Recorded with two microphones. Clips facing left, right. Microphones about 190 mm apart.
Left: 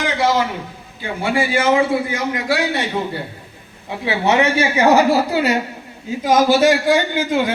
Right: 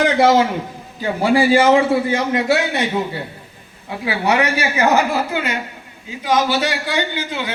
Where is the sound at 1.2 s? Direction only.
35° right (ahead or behind).